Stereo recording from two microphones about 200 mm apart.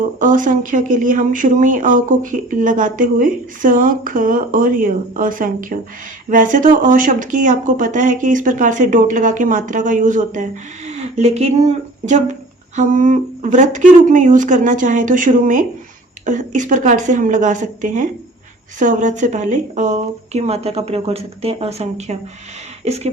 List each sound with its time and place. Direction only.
0.0 s speech: 40° right (ahead or behind)